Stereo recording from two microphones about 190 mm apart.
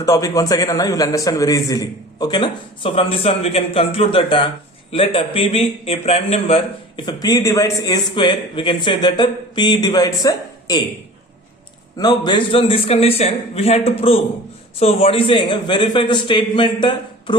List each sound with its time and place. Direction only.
0.0 s a man's voice: 20° left (ahead or behind)
11.9 s a man's voice: 20° left (ahead or behind)